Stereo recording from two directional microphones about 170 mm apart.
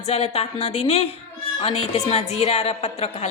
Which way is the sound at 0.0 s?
40° left (ahead or behind).